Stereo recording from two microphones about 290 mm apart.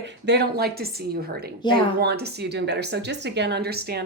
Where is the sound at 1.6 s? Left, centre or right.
Centre.